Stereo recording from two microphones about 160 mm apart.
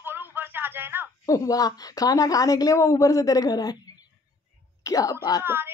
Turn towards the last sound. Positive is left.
turn(degrees=-15)  # may be behind; listen again after turning